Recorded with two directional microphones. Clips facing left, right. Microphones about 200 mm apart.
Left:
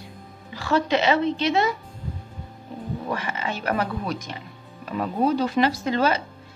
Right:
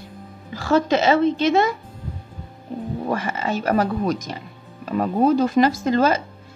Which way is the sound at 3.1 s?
45° right (ahead or behind).